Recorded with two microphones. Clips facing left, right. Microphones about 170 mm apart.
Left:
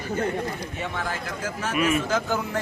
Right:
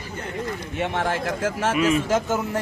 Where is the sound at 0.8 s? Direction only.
75° right (ahead or behind).